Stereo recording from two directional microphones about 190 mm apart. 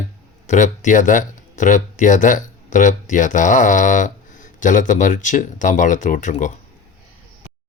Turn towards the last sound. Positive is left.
turn(degrees=40)  # may be behind; listen again after turning